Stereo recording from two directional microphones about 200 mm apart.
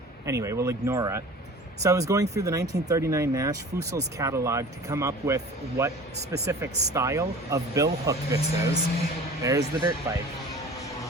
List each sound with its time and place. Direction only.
0.3 s speech: 15° right (ahead or behind)